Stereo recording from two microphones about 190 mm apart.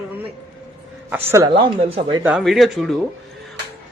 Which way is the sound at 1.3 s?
20° right (ahead or behind).